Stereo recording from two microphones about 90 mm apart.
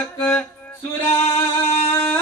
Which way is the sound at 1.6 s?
90° left.